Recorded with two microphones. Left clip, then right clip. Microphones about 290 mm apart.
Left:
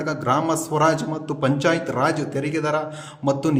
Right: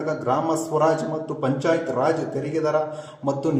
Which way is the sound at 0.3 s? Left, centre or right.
Left.